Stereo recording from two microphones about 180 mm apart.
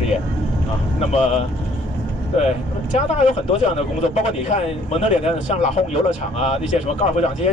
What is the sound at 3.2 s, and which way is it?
Speech, 40° left (ahead or behind).